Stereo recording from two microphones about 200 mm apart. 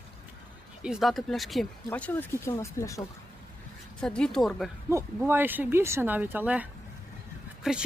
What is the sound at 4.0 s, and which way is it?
Speech, 5° left (ahead or behind).